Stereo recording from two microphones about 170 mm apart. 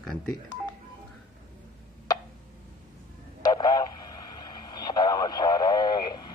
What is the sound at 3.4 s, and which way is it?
Radio, 25° left (ahead or behind).